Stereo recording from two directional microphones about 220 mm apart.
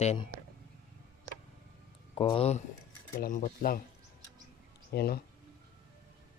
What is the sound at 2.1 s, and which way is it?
Speech, 25° left (ahead or behind).